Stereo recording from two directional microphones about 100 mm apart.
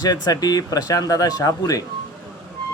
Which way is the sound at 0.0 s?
40° left (ahead or behind).